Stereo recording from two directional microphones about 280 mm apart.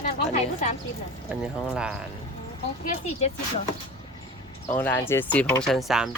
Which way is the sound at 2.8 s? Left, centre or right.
Left.